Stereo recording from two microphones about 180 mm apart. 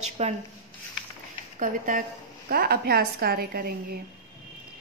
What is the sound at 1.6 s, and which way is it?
A woman's voice, 45° right (ahead or behind).